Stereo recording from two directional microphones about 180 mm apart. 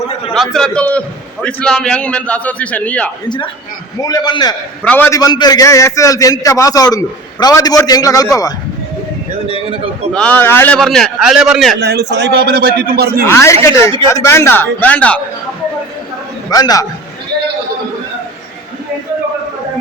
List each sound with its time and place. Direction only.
0.3 s a man's voice: 5° left (ahead or behind)
3.2 s a man's voice: 25° left (ahead or behind)
4.8 s a man's voice: 10° left (ahead or behind)
10.1 s a man's voice: 5° left (ahead or behind)
10.8 s a man's voice: centre (ahead or behind)
11.8 s a man's voice: 70° right (ahead or behind)
12.5 s a man's voice: 55° right (ahead or behind)
13.2 s a man's voice: 15° left (ahead or behind)
16.5 s a man's voice: 20° left (ahead or behind)